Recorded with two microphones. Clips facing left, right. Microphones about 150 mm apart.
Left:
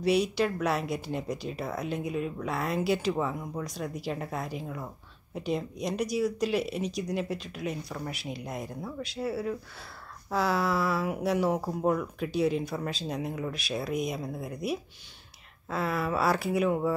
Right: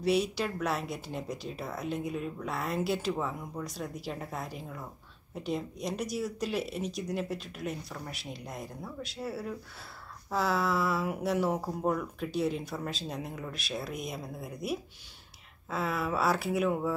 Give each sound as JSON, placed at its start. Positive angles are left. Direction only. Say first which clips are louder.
{"t": 0.0, "sound": "speech", "louder": "left 3 dB", "side_deg": 0}